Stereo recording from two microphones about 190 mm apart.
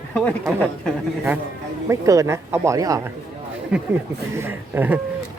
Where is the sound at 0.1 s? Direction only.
5° left (ahead or behind).